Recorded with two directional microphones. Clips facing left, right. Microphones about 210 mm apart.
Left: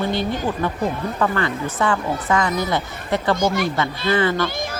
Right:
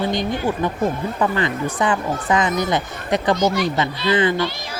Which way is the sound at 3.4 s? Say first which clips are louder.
Right 1 dB; 50° left (ahead or behind).